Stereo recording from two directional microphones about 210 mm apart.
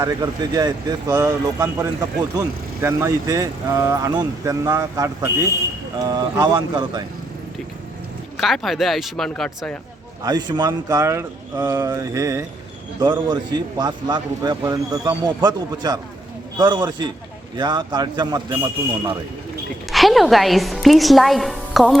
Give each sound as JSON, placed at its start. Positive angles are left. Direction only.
{"t": 0.0, "sound": "a man's voice", "side_deg": -15}
{"t": 8.4, "sound": "speech", "side_deg": 0}
{"t": 10.2, "sound": "a man's voice", "side_deg": -20}
{"t": 19.9, "sound": "a woman's voice", "side_deg": 0}